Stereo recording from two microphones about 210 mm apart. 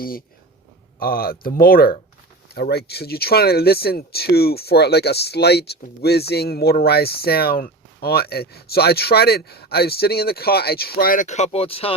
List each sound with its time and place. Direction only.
0.9 s speech: 45° left (ahead or behind); by 11.9 s 25° left (ahead or behind)